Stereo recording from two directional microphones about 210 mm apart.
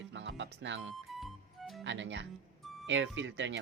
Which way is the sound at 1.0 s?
Centre (ahead or behind).